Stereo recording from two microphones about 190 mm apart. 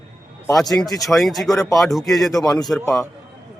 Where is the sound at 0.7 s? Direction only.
Centre (ahead or behind).